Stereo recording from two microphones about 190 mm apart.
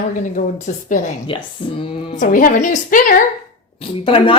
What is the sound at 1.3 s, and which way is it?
Speech, 25° left (ahead or behind).